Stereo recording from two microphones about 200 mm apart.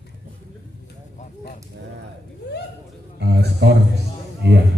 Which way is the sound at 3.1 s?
55° right (ahead or behind).